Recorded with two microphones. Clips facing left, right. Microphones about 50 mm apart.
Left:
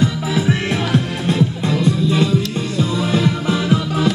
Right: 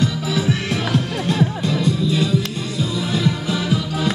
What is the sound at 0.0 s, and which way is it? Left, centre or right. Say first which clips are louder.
Music: left 2 dB; left.